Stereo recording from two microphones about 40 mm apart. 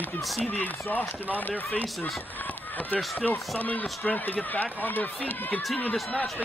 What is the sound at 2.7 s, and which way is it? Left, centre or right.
Speech, left.